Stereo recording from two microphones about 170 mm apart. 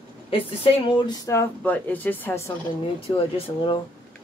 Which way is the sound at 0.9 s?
25° left (ahead or behind).